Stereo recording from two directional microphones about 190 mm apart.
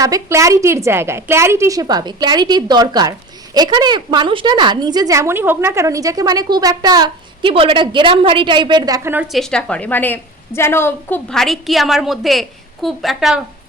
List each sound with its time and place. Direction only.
0.0 s a woman's voice: 15° right (ahead or behind)
9.1 s a woman's voice: centre (ahead or behind)